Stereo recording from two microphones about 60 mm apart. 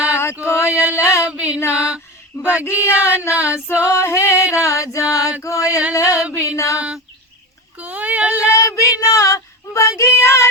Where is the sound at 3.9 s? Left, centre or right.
Left.